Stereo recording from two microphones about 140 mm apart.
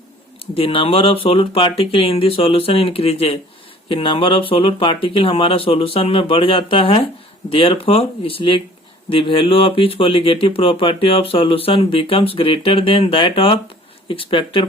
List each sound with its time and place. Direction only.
0.5 s speech: 40° left (ahead or behind)